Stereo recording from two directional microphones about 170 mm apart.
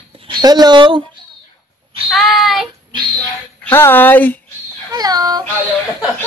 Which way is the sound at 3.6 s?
10° left (ahead or behind).